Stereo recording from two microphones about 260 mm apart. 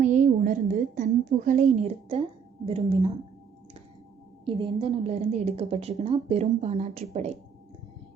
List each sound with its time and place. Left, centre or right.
0.0 s a woman's voice: right
4.4 s a woman's voice: centre